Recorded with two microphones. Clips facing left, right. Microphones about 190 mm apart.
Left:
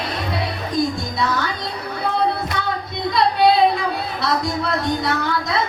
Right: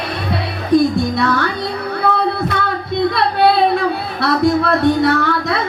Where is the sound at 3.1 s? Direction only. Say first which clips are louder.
Left 1 dB; 60° right (ahead or behind).